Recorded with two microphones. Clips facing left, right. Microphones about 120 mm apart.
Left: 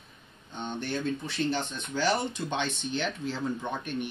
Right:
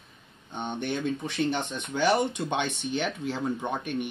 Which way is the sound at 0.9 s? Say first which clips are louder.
Even; 15° right (ahead or behind).